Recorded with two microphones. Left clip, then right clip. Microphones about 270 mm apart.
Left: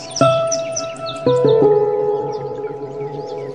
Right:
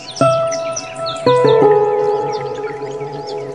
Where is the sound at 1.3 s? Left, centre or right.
Right.